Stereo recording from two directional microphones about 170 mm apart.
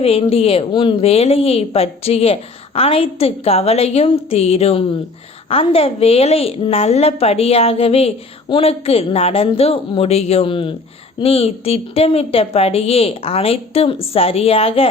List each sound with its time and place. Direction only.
0.0 s a woman's voice: 35° left (ahead or behind)